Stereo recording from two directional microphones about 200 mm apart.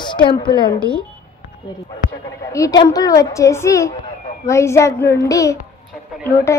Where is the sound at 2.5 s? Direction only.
20° left (ahead or behind).